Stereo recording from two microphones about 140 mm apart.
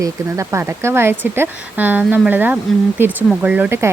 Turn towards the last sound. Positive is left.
turn(degrees=-15)  # may be behind; listen again after turning